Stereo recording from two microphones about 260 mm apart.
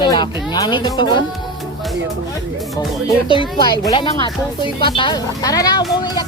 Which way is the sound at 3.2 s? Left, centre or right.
Centre.